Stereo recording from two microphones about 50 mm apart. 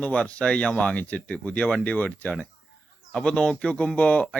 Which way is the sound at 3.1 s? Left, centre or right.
Centre.